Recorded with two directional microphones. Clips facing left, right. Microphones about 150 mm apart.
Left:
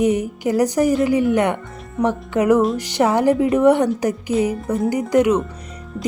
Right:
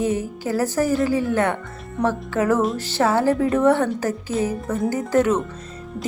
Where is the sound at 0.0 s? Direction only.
15° left (ahead or behind).